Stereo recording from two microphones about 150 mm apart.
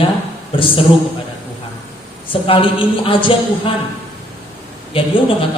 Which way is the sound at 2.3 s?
35° left (ahead or behind).